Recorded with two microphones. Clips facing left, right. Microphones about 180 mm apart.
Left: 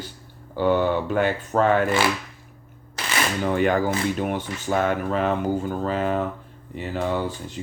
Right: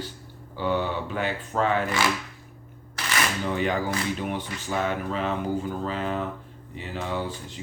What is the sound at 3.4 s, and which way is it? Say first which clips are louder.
Speech: left 8 dB; 55° left (ahead or behind).